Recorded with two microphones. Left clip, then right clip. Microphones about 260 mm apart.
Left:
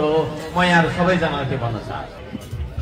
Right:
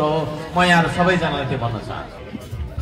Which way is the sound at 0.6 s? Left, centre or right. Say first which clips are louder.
Right 1 dB; right.